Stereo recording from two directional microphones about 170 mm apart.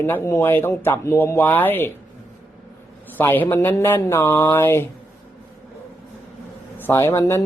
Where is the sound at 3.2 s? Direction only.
10° left (ahead or behind).